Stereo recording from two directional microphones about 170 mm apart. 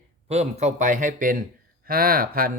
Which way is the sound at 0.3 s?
40° right (ahead or behind).